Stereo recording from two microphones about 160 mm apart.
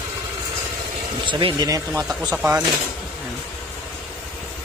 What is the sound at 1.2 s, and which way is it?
Speech, 30° right (ahead or behind).